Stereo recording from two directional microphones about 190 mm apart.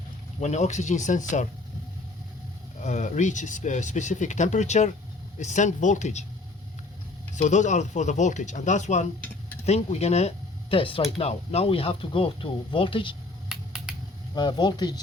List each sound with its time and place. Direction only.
0.3 s speech: 35° left (ahead or behind)
2.8 s speech: 40° left (ahead or behind)
7.3 s speech: 40° left (ahead or behind)
13.5 s finger snapping: 5° right (ahead or behind)
14.3 s speech: 25° left (ahead or behind)